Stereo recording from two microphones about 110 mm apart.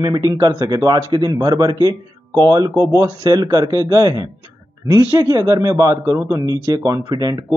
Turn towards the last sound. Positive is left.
turn(degrees=-40)  # may be behind; listen again after turning